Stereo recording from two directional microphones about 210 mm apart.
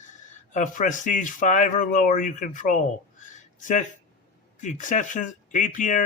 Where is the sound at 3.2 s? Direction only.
35° left (ahead or behind).